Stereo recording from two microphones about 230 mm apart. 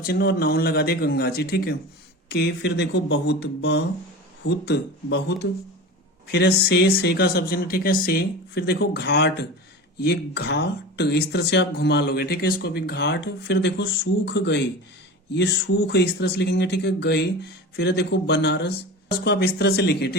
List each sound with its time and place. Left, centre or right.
0.0 s speech: left